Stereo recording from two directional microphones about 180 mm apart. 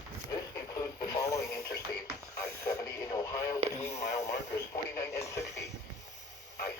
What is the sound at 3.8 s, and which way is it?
Radio, 40° left (ahead or behind).